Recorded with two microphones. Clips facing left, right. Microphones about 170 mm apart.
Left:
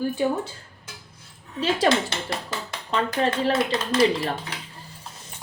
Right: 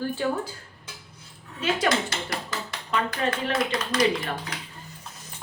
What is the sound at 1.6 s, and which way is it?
Speech, 30° left (ahead or behind).